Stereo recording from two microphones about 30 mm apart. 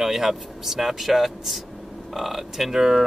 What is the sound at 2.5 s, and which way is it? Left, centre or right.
Speech, centre.